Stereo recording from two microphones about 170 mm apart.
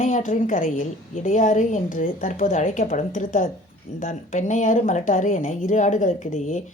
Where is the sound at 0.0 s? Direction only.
50° left (ahead or behind).